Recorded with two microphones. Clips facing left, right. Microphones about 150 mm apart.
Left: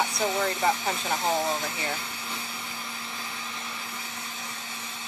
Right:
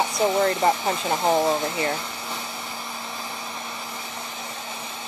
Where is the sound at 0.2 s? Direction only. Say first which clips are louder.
Right 8 dB; 50° right (ahead or behind).